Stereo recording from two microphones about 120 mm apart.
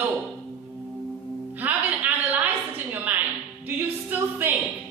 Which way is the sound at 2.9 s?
15° right (ahead or behind).